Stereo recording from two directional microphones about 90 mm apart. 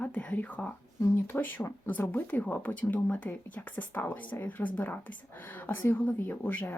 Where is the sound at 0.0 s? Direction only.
15° left (ahead or behind).